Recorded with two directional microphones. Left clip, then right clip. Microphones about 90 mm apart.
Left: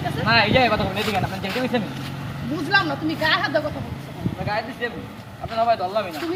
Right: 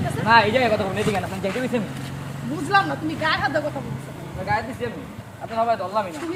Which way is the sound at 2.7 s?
25° right (ahead or behind).